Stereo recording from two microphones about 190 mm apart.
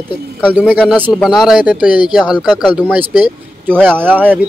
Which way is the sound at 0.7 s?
10° right (ahead or behind).